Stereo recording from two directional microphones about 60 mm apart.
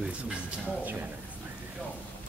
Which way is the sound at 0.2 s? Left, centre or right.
Centre.